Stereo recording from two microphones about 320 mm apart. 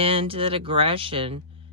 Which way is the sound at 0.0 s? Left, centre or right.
Centre.